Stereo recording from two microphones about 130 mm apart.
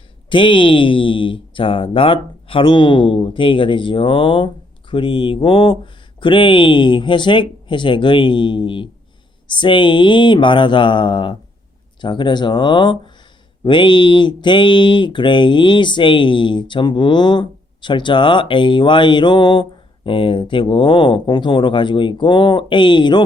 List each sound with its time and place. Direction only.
0.3 s speech: 40° left (ahead or behind)